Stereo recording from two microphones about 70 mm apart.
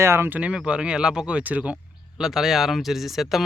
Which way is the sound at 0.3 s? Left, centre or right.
Centre.